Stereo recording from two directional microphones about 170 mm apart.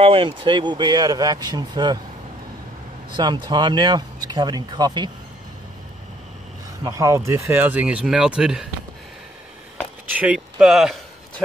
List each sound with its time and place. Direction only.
0.0 s speech: 30° right (ahead or behind)
3.1 s speech: 25° right (ahead or behind)
6.8 s speech: 20° right (ahead or behind)
10.1 s speech: 5° right (ahead or behind)